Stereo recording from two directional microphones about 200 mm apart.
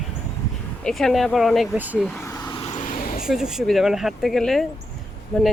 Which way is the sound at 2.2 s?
20° left (ahead or behind).